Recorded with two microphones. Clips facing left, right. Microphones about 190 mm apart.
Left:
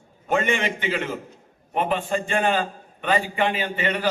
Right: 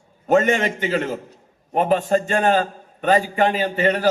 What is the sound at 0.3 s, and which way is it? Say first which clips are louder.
A man's voice: right 6 dB; 40° right (ahead or behind).